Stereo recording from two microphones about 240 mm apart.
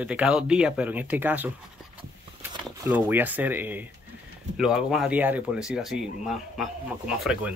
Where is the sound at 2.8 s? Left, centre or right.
Centre.